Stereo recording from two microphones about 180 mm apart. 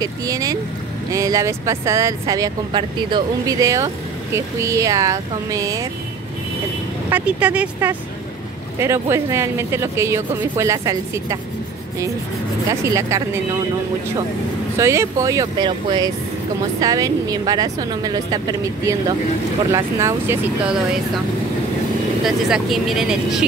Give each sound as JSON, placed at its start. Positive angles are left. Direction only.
{"t": 0.0, "sound": "a woman's voice", "side_deg": -20}
{"t": 7.1, "sound": "speech", "side_deg": -10}
{"t": 12.9, "sound": "speech", "side_deg": -15}
{"t": 14.8, "sound": "a woman's voice", "side_deg": -15}
{"t": 22.2, "sound": "speech", "side_deg": 0}